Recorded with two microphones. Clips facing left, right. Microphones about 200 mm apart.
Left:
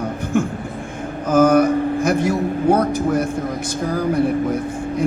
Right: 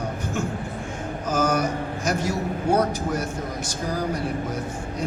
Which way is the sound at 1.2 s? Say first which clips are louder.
Left 10 dB; 55° left (ahead or behind).